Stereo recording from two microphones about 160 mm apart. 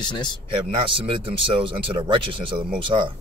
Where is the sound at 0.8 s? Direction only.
30° right (ahead or behind).